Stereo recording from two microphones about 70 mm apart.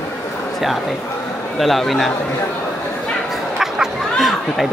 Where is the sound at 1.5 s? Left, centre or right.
Centre.